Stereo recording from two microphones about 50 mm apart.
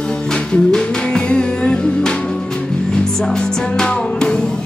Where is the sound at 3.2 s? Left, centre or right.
Centre.